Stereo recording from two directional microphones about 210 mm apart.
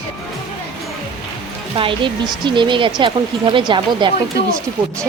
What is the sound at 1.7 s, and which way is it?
Speech, 25° right (ahead or behind).